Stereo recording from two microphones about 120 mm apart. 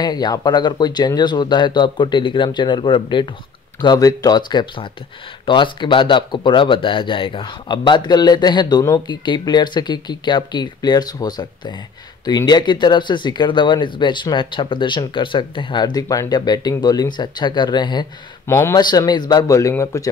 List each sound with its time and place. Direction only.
0.0 s speech: 35° left (ahead or behind)
18.5 s speech: 20° left (ahead or behind)
18.8 s speech: 35° left (ahead or behind)